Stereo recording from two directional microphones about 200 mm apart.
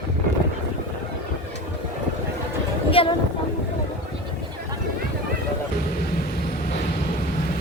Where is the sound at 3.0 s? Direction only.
30° left (ahead or behind).